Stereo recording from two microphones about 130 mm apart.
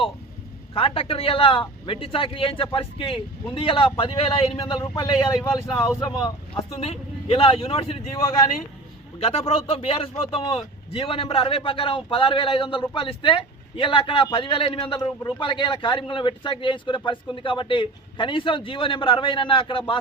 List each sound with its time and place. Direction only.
0.7 s a man's voice: 45° left (ahead or behind)
4.6 s speech: 30° left (ahead or behind)
6.7 s a man's voice: 50° left (ahead or behind)
9.2 s a man's voice: 50° left (ahead or behind)